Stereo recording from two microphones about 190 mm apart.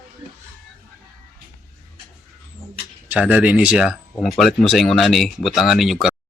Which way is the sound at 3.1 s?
5° right (ahead or behind).